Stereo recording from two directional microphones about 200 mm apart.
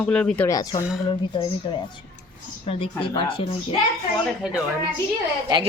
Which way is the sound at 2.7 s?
25° left (ahead or behind).